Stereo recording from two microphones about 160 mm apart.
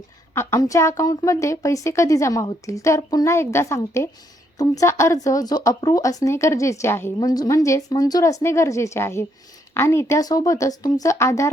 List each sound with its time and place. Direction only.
0.3 s a woman's voice: 15° left (ahead or behind)